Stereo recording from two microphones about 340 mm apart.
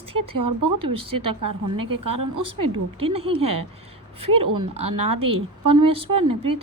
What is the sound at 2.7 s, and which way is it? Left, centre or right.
Speech, centre.